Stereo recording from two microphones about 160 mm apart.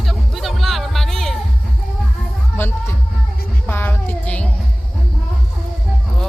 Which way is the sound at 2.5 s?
15° left (ahead or behind).